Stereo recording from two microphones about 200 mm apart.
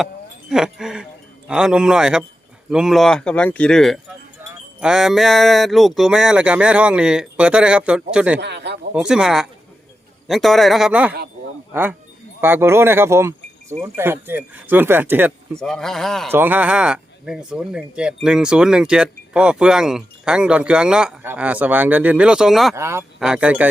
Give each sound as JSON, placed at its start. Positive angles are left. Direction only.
{"t": 0.0, "sound": "speech", "side_deg": -5}
{"t": 4.4, "sound": "cowbell", "side_deg": -10}
{"t": 4.8, "sound": "speech", "side_deg": -5}
{"t": 8.4, "sound": "speech", "side_deg": -60}
{"t": 9.0, "sound": "speech", "side_deg": -5}
{"t": 15.5, "sound": "speech", "side_deg": 5}
{"t": 16.3, "sound": "speech", "side_deg": -10}
{"t": 22.7, "sound": "speech", "side_deg": -15}